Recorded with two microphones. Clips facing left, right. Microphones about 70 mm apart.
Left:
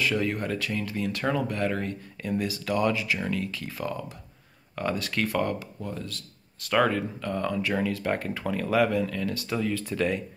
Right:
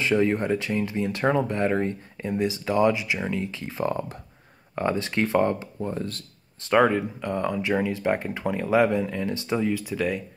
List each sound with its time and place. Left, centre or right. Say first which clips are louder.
0.0 s speech: right 5 dB; right
6.7 s speech: right 4 dB; centre